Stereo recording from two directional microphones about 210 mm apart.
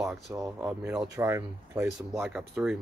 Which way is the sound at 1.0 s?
15° right (ahead or behind).